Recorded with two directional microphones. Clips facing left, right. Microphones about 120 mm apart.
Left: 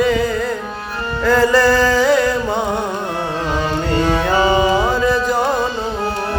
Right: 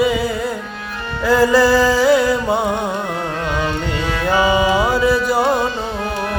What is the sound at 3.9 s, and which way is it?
Music, 45° left (ahead or behind).